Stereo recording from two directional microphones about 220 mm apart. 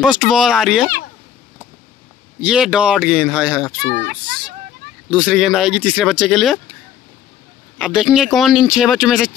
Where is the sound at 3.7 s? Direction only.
50° right (ahead or behind).